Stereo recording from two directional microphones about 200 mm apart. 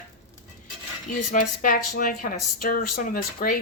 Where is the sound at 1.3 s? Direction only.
40° left (ahead or behind).